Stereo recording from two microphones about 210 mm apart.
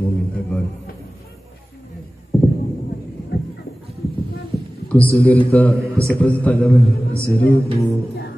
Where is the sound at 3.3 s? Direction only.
50° left (ahead or behind).